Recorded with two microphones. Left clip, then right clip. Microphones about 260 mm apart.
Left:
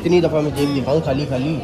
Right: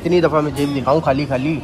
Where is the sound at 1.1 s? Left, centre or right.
Right.